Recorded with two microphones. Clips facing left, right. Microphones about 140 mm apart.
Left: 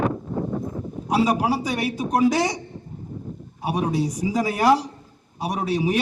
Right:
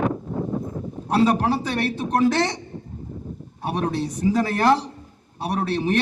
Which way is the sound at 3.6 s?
5° left (ahead or behind).